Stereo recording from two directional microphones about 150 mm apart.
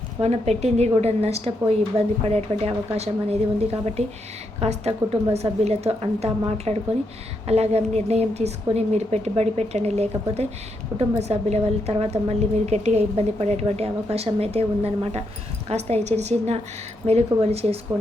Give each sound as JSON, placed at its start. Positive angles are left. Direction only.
{"t": 0.2, "sound": "a woman's voice", "side_deg": -45}